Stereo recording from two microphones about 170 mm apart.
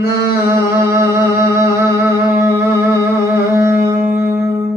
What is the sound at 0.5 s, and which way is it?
Music, 15° right (ahead or behind).